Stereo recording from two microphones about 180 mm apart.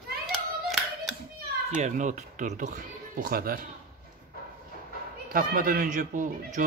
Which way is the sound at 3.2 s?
55° right (ahead or behind).